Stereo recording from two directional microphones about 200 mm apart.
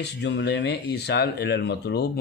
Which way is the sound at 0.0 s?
60° left (ahead or behind).